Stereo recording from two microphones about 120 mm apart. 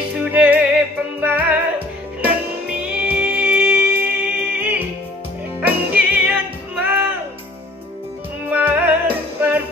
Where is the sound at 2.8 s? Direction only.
10° right (ahead or behind).